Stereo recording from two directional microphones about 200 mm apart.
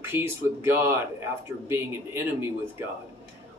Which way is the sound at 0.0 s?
10° right (ahead or behind).